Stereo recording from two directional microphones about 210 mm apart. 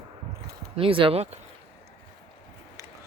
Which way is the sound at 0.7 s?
25° right (ahead or behind).